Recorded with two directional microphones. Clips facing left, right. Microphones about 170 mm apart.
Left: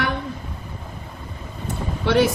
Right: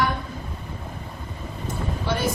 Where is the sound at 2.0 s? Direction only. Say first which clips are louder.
Left 9 dB; 70° left (ahead or behind).